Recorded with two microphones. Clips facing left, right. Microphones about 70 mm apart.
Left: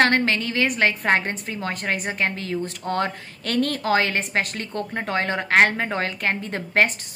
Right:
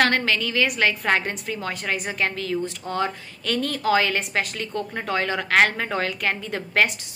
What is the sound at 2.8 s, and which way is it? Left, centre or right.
A woman's voice, left.